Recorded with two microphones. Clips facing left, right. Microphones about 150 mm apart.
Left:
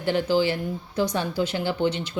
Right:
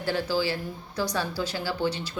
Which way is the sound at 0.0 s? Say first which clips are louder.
Left 5 dB; 20° left (ahead or behind).